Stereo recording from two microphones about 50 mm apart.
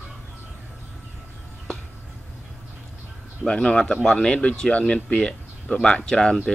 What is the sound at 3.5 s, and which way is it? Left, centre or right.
Speech, centre.